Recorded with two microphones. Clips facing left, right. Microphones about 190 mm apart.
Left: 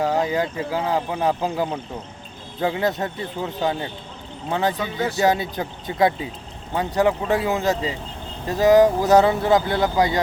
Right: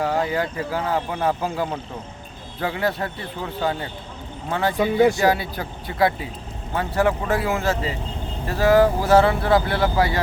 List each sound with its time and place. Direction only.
0.0 s speech: 15° left (ahead or behind)
4.8 s speech: 15° right (ahead or behind)
5.1 s speech: 20° left (ahead or behind)